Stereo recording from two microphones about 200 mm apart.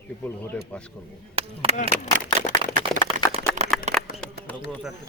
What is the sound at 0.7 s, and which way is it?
Speech, 5° left (ahead or behind).